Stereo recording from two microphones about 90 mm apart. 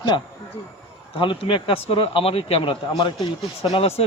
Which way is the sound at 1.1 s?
70° left (ahead or behind).